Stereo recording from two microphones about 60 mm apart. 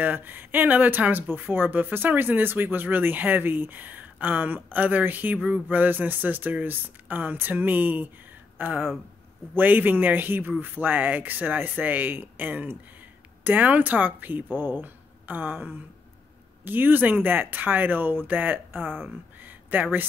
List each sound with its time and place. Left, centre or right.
0.0 s speech: right